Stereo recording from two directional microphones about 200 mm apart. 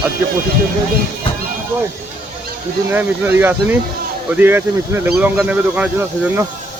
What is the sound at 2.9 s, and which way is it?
Speech, 10° right (ahead or behind).